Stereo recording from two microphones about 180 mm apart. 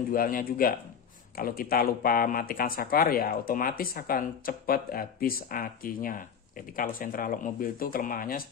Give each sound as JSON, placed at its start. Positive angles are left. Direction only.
{"t": 0.1, "sound": "speech", "side_deg": 50}